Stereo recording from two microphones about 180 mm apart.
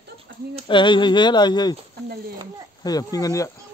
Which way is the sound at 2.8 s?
20° left (ahead or behind).